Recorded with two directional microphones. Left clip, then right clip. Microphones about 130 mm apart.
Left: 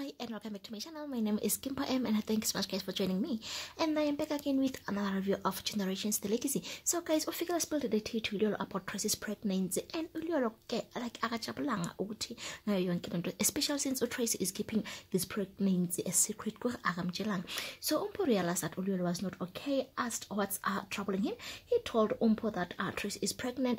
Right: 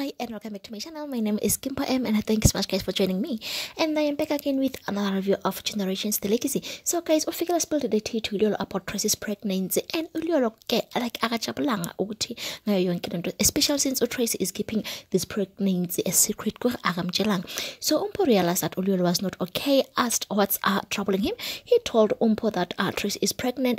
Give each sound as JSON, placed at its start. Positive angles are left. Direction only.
{"t": 1.1, "sound": "speech", "side_deg": -50}